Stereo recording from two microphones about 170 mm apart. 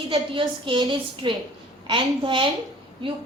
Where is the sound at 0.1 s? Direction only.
30° right (ahead or behind).